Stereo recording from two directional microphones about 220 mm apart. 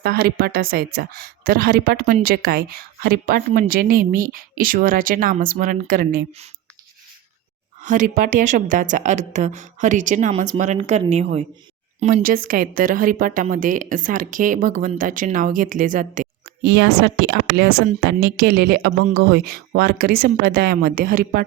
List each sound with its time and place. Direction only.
0.0 s a woman's voice: 45° right (ahead or behind)
7.8 s a woman's voice: 35° right (ahead or behind)
16.6 s speech: 50° right (ahead or behind)